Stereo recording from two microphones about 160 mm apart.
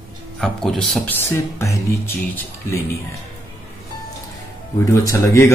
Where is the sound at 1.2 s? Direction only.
20° left (ahead or behind).